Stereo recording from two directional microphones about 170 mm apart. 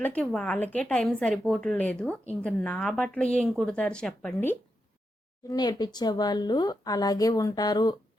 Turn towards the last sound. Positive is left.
turn(degrees=25)  # may be behind; listen again after turning